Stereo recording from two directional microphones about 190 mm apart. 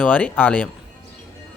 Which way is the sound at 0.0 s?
10° left (ahead or behind).